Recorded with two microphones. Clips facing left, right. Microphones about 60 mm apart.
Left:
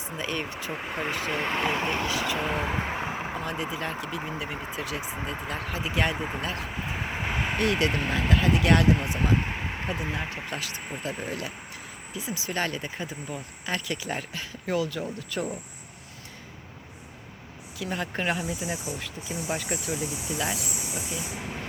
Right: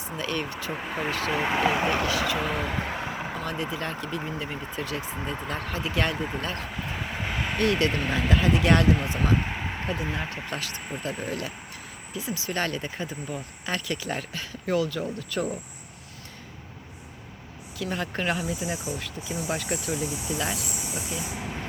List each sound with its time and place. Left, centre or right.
0.2 s speech: centre
0.7 s speech: centre
2.0 s speech: centre
6.7 s vehicle: centre
8.1 s speech: centre
17.7 s speech: centre